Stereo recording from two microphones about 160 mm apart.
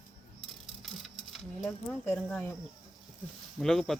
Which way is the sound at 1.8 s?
15° left (ahead or behind).